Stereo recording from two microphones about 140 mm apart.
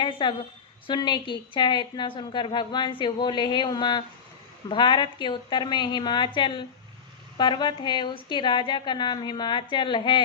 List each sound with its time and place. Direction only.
0.0 s a woman's voice: 35° left (ahead or behind)